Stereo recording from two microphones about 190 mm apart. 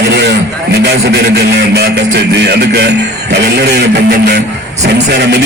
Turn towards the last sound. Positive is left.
turn(degrees=-60)  # may be behind; listen again after turning